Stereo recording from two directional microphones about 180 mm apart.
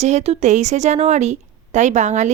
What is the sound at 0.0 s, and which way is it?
Speech, 35° right (ahead or behind).